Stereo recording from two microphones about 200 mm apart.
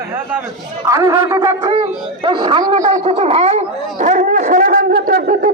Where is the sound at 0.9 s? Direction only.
15° right (ahead or behind).